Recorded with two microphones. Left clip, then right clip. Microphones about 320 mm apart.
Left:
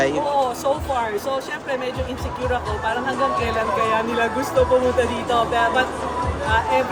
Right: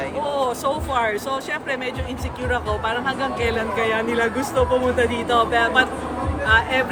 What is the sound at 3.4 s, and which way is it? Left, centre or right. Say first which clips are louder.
Speech: left 1 dB; centre.